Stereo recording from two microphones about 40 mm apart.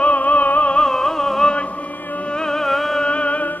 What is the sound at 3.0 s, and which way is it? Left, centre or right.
Music, left.